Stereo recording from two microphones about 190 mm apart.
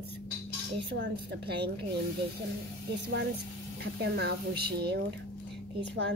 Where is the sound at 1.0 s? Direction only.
65° right (ahead or behind).